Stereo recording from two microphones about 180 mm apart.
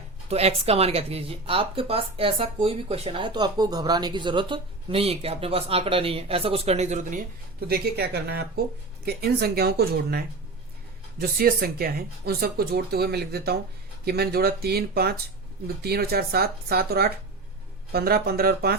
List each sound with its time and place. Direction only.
0.3 s speech: 35° right (ahead or behind)
7.7 s speech: 60° right (ahead or behind)